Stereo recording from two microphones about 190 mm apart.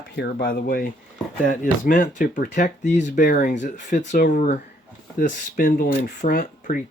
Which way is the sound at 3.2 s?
50° left (ahead or behind).